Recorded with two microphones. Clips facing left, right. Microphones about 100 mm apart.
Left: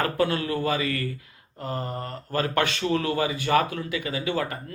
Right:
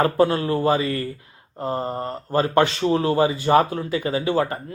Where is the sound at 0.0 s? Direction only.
30° right (ahead or behind).